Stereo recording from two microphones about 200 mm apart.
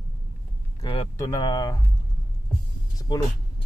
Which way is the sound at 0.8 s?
20° left (ahead or behind).